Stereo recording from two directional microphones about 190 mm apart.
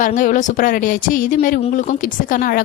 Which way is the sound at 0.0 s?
45° left (ahead or behind).